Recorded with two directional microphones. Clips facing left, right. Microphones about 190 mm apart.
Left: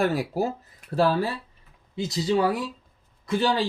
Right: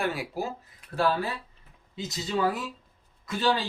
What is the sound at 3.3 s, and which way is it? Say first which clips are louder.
Speech: left 3 dB; 25° left (ahead or behind).